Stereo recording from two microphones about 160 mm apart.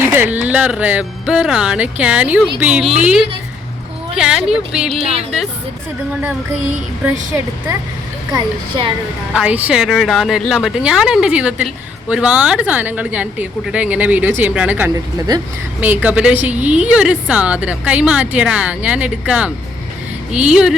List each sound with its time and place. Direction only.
0.0 s speech: 15° right (ahead or behind)
7.0 s speech: 15° right (ahead or behind)
8.3 s speech: 30° right (ahead or behind)
9.3 s speech: 5° right (ahead or behind)
15.3 s speech: 25° right (ahead or behind)
15.8 s speech: 10° right (ahead or behind)